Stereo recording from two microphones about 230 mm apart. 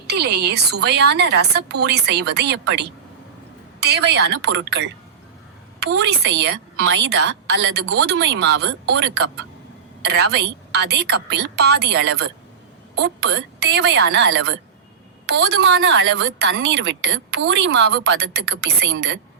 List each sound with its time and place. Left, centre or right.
0.1 s a woman's voice: right